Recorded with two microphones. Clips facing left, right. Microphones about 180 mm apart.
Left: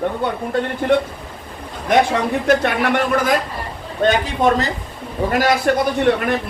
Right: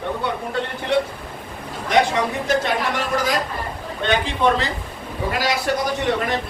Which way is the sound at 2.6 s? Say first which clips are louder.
Left 4 dB; 60° left (ahead or behind).